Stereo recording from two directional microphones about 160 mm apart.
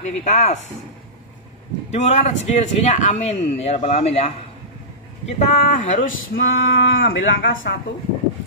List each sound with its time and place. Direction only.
0.0 s a man's voice: 45° left (ahead or behind)
1.9 s a man's voice: 45° left (ahead or behind)
5.4 s a sound: 50° left (ahead or behind); by 7.7 s 75° left (ahead or behind)